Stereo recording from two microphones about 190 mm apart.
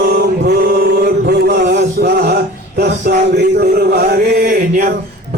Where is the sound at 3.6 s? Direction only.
55° right (ahead or behind).